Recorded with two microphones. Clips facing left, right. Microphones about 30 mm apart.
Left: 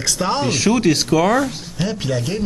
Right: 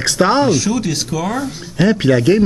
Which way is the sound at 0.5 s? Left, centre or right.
Left.